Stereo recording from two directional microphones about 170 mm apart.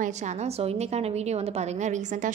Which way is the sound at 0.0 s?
45° right (ahead or behind).